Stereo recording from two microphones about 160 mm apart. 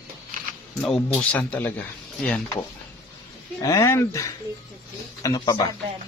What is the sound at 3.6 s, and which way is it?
Speech, 20° left (ahead or behind).